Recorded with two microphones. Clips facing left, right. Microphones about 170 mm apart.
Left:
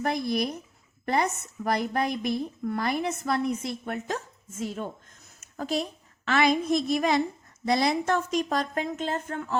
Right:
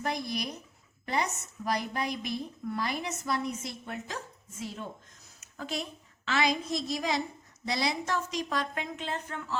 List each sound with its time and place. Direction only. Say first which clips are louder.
0.0 s a woman's voice: left 6 dB; 55° left (ahead or behind)
5.4 s a sound: left 7 dB; 40° left (ahead or behind)
6.2 s a woman's voice: left 6 dB; 55° left (ahead or behind)